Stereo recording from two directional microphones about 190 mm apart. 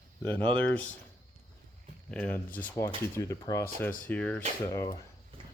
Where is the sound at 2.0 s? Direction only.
10° left (ahead or behind).